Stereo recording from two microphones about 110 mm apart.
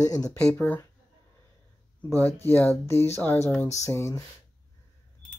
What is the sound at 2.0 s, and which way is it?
Speech, 15° left (ahead or behind).